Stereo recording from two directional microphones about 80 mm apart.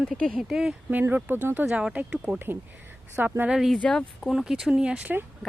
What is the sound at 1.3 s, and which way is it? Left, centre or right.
Speech, right.